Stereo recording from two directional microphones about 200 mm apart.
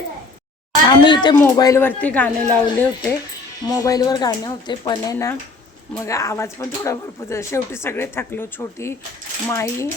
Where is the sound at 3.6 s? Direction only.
15° left (ahead or behind).